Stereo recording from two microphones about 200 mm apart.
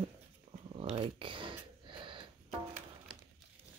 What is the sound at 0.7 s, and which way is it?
Sniff, 30° right (ahead or behind).